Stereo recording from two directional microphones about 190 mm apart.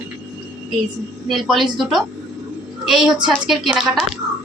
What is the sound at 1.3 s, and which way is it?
Speech, centre (ahead or behind).